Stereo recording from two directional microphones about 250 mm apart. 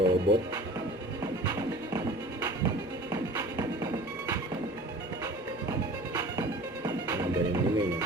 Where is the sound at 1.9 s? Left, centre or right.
Centre.